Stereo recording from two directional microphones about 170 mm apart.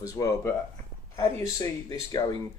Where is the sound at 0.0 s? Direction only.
20° left (ahead or behind).